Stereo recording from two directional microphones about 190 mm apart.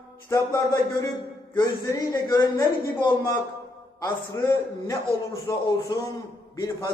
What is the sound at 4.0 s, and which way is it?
A man's voice, 15° left (ahead or behind).